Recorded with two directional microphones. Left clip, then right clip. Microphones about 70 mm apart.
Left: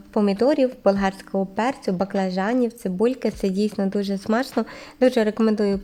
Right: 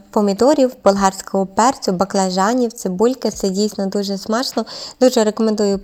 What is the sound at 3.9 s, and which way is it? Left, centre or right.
Speech, centre.